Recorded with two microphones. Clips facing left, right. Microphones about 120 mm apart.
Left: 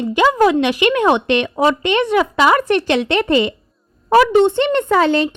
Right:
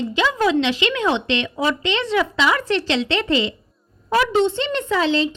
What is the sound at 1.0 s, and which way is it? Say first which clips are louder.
Speech: left 6 dB; 55° left (ahead or behind).